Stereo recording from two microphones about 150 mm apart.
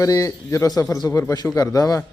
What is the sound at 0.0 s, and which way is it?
Speech, 20° left (ahead or behind).